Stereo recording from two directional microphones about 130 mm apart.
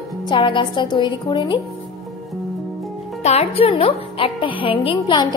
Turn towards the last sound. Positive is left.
turn(degrees=40)  # may be behind; listen again after turning